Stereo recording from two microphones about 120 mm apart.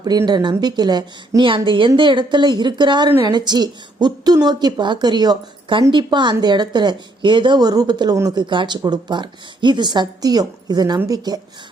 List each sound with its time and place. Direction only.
0.3 s speech: 35° right (ahead or behind)